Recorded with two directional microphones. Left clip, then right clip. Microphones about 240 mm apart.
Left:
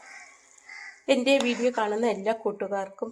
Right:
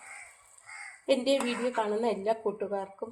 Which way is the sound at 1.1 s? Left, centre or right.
Left.